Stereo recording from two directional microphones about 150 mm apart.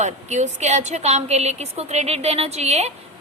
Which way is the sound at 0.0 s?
50° right (ahead or behind).